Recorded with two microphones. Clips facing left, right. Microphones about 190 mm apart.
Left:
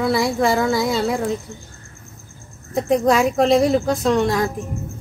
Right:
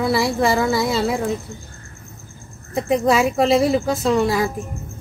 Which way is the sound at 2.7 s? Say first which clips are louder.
Left 1 dB; centre (ahead or behind).